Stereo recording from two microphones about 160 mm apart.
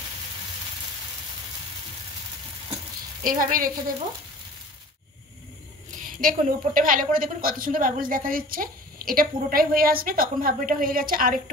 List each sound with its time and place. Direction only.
3.3 s a woman's voice: 60° right (ahead or behind)
6.0 s a woman's voice: 60° right (ahead or behind)